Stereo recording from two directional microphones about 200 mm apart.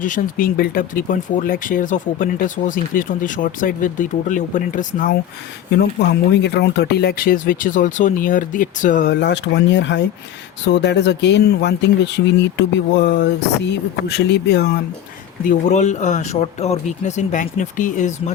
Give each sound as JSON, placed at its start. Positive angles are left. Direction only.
{"t": 0.0, "sound": "speech", "side_deg": 40}
{"t": 5.7, "sound": "speech", "side_deg": 55}
{"t": 9.0, "sound": "speech", "side_deg": 60}
{"t": 15.4, "sound": "speech", "side_deg": 35}